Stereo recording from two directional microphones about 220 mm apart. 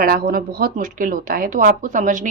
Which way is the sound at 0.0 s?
40° right (ahead or behind).